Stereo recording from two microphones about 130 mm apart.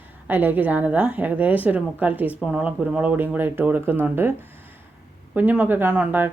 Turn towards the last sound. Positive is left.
turn(degrees=-15)  # may be behind; listen again after turning